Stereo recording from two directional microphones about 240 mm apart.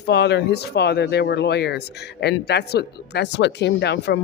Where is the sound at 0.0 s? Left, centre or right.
Left.